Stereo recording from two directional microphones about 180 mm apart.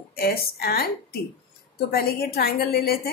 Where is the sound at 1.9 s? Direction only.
60° left (ahead or behind).